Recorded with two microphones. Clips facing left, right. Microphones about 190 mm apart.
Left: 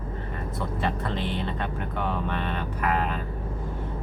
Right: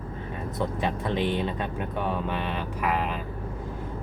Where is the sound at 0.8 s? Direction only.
15° right (ahead or behind).